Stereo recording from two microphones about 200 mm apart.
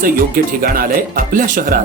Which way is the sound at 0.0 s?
45° right (ahead or behind).